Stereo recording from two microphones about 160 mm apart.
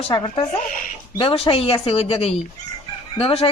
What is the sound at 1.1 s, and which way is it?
Speech, 35° left (ahead or behind).